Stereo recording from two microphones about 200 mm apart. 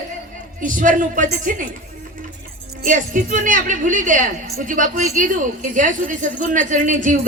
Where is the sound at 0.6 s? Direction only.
40° right (ahead or behind).